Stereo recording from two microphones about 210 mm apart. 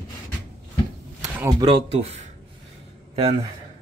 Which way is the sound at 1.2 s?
10° right (ahead or behind).